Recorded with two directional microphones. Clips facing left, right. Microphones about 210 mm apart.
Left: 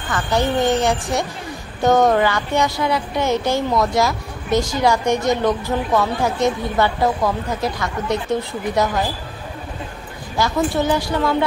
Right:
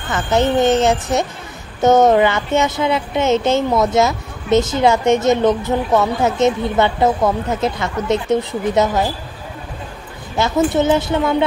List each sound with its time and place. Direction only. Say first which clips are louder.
0.1 s speech: right 4 dB; 20° right (ahead or behind)
10.3 s speech: right 3 dB; 20° right (ahead or behind)